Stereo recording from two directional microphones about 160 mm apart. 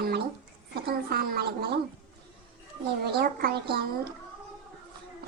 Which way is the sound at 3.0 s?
80° right.